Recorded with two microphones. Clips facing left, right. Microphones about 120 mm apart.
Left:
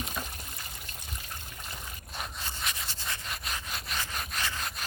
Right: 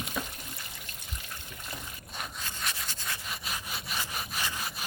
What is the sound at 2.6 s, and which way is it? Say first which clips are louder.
Rub: right 1 dB; centre (ahead or behind).